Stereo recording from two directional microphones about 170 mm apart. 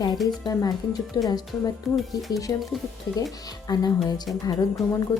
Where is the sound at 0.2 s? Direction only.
Centre (ahead or behind).